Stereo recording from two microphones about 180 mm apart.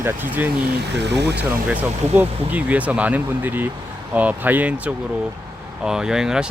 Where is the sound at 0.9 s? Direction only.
70° right (ahead or behind).